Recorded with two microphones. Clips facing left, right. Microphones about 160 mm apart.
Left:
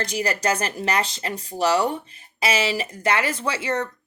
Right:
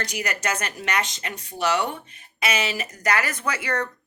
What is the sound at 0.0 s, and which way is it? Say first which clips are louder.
Speech: left 4 dB; 30° left (ahead or behind).